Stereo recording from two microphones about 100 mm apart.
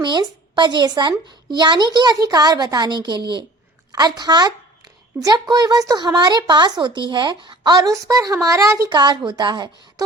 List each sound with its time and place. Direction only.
0.0 s speech: 45° right (ahead or behind); by 8.9 s 30° right (ahead or behind)
8.9 s speech: 45° right (ahead or behind)